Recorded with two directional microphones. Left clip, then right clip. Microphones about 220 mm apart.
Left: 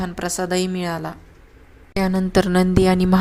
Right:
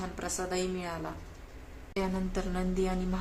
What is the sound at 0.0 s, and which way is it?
A woman's voice, 40° left (ahead or behind).